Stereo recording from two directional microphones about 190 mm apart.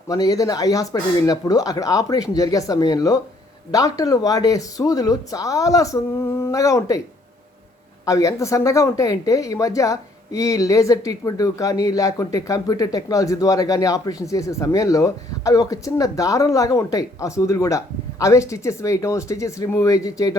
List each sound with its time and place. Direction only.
0.1 s speech: 20° left (ahead or behind)
8.0 s speech: 15° left (ahead or behind)